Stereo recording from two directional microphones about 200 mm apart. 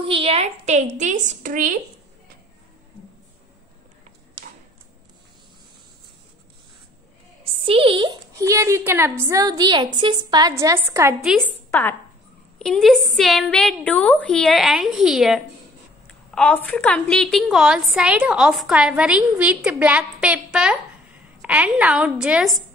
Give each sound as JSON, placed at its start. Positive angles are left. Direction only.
{"t": 0.0, "sound": "a woman's voice", "side_deg": -25}
{"t": 7.6, "sound": "a woman's voice", "side_deg": -25}
{"t": 11.2, "sound": "a woman's voice", "side_deg": 5}